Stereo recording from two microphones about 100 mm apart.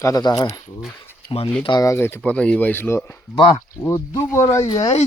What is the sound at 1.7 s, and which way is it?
Speech, 40° left (ahead or behind).